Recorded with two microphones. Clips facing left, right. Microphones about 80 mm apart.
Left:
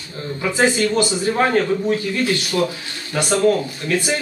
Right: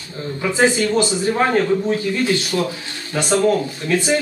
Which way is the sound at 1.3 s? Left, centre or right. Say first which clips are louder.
Right 1 dB; centre.